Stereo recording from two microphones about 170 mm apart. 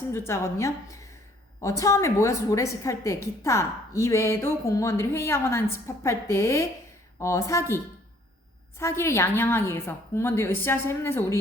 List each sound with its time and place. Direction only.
0.1 s a woman's voice: 15° left (ahead or behind)
8.8 s a woman's voice: 15° left (ahead or behind)